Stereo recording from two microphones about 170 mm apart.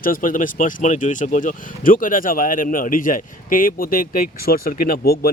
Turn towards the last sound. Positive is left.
turn(degrees=60)  # may be behind; listen again after turning